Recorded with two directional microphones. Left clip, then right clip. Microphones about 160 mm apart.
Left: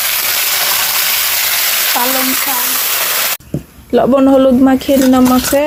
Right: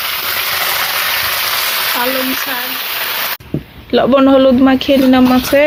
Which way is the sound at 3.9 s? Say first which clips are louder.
Even; 25° left (ahead or behind).